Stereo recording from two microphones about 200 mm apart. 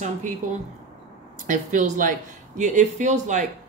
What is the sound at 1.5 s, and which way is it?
Speech, 40° right (ahead or behind).